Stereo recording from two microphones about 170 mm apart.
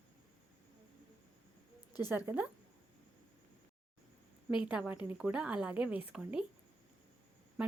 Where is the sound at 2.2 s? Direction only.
10° right (ahead or behind).